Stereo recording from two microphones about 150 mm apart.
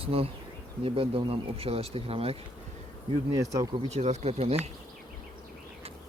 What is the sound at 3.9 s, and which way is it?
Speech, 50° right (ahead or behind).